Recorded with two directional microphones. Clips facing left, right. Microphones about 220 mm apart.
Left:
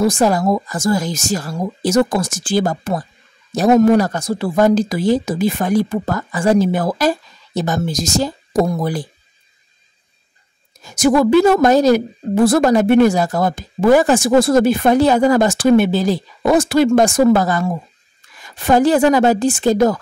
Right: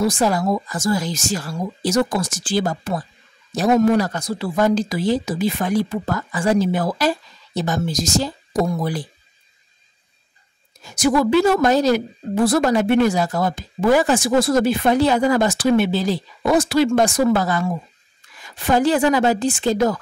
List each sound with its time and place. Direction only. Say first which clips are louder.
0.0 s a woman's voice: left 4 dB; 45° left (ahead or behind)
10.8 s a woman's voice: left 4 dB; 45° left (ahead or behind)